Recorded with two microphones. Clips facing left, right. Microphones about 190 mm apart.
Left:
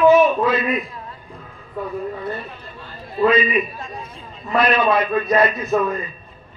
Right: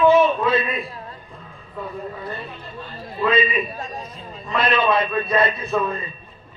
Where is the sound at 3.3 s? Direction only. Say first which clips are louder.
Right 1 dB; 30° right (ahead or behind).